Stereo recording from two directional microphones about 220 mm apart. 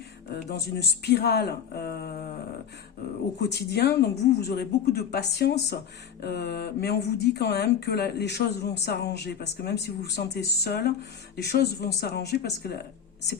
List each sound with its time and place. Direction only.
0.3 s speech: 50° left (ahead or behind)
3.5 s speech: 50° left (ahead or behind)